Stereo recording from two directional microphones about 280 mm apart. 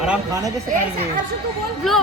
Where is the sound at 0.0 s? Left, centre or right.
Centre.